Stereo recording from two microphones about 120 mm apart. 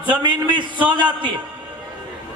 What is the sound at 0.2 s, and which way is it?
Speech, 40° right (ahead or behind).